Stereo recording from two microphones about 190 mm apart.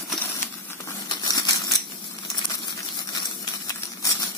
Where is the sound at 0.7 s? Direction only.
20° left (ahead or behind).